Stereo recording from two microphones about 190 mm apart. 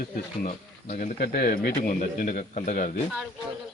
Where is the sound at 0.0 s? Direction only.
40° left (ahead or behind).